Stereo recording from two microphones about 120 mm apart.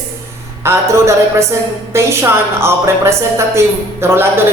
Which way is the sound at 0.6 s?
20° right (ahead or behind).